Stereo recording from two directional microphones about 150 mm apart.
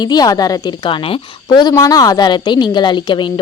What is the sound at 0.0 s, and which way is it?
A woman's voice, 25° left (ahead or behind).